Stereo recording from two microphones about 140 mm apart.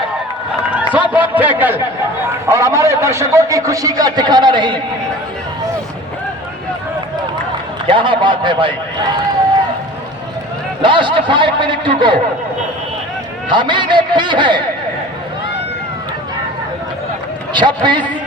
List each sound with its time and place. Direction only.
1.1 s a man's voice: 10° right (ahead or behind); by 4.8 s 35° right (ahead or behind)
7.9 s a man's voice: 35° right (ahead or behind)
10.8 s a man's voice: 35° right (ahead or behind)
13.5 s a man's voice: 35° right (ahead or behind)
17.5 s a man's voice: 35° right (ahead or behind)